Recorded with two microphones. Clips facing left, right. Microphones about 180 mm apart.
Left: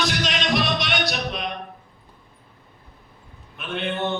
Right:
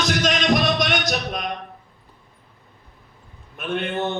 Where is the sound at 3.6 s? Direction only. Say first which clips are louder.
Right 6 dB; 45° right (ahead or behind).